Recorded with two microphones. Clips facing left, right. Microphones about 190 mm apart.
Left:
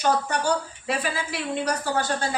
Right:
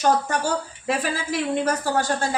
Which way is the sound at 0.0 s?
45° right (ahead or behind).